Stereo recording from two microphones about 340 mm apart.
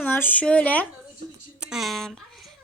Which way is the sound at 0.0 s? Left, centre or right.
Centre.